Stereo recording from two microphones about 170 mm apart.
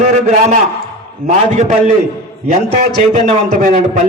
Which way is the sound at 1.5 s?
45° right (ahead or behind).